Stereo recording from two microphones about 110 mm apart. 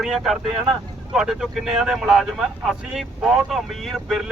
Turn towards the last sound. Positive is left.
turn(degrees=0)  # may be behind; listen again after turning